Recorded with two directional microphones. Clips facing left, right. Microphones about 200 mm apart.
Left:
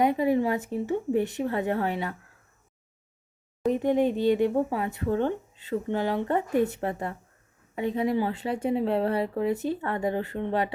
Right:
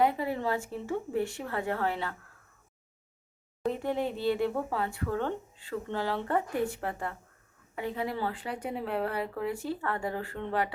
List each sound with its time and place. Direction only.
0.0 s speech: 20° left (ahead or behind)
3.7 s speech: 20° left (ahead or behind)